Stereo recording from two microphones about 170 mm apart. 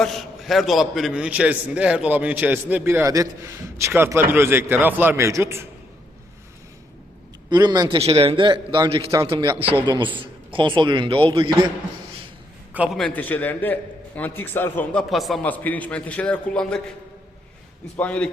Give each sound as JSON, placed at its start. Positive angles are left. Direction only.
{"t": 0.0, "sound": "a man's voice", "side_deg": 0}
{"t": 7.5, "sound": "a man's voice", "side_deg": -25}
{"t": 12.7, "sound": "a man's voice", "side_deg": -5}
{"t": 13.0, "sound": "a man's voice", "side_deg": 5}
{"t": 15.1, "sound": "a man's voice", "side_deg": 0}
{"t": 17.9, "sound": "a man's voice", "side_deg": 5}